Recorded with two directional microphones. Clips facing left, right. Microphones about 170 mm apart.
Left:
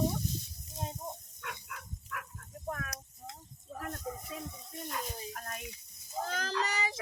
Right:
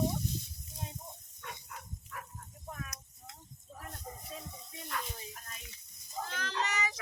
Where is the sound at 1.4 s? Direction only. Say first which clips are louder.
Left 2 dB; 75° left (ahead or behind).